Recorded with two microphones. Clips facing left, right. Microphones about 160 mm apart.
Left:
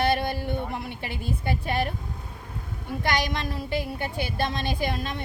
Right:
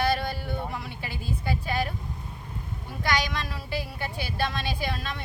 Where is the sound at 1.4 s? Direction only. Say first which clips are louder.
Left 2 dB; 55° left (ahead or behind).